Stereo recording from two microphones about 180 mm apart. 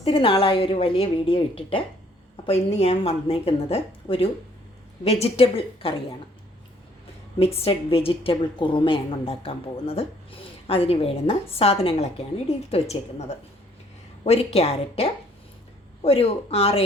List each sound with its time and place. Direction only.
0.0 s a woman's voice: 30° left (ahead or behind)
7.3 s a woman's voice: 35° left (ahead or behind)